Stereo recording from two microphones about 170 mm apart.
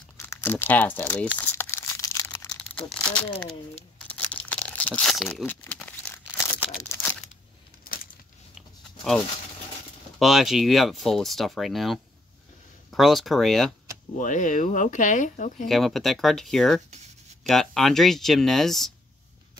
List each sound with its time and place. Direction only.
0.2 s crumpling: 15° left (ahead or behind)
2.4 s speech: 5° left (ahead or behind)
4.1 s crumpling: 10° left (ahead or behind)
6.3 s tearing: 10° left (ahead or behind)
7.8 s a sound: 60° left (ahead or behind)
8.5 s a sound: centre (ahead or behind)
10.1 s speech: centre (ahead or behind)
14.1 s speech: 50° left (ahead or behind)
15.6 s speech: centre (ahead or behind)